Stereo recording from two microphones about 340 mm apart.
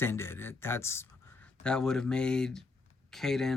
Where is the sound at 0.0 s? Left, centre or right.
Centre.